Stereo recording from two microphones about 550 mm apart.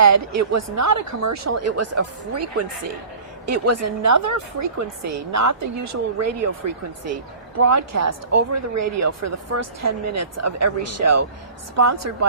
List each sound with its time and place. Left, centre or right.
0.0 s a woman's voice: right